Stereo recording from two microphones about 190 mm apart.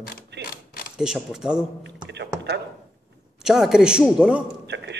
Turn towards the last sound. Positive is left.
turn(degrees=-65)  # may be behind; listen again after turning